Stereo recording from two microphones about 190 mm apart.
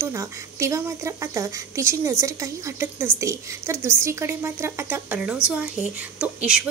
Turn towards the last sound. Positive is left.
turn(degrees=-5)  # may be behind; listen again after turning